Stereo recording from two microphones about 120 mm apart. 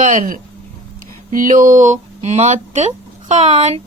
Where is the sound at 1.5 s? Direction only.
90° right; by 3.8 s 70° right (ahead or behind).